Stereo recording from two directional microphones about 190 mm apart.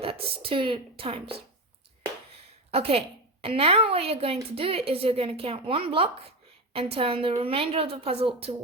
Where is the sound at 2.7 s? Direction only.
30° right (ahead or behind).